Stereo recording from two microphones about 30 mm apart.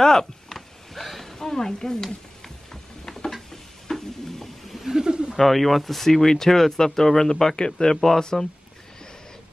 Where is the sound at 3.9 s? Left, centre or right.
Centre.